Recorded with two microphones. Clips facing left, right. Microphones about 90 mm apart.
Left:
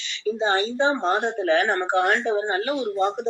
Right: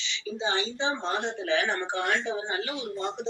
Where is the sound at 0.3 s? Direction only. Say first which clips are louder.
Left 8 dB; 45° left (ahead or behind).